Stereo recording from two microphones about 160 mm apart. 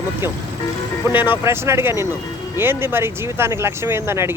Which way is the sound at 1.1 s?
15° right (ahead or behind).